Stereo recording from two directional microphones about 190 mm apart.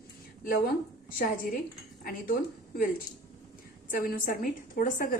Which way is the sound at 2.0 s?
50° left (ahead or behind).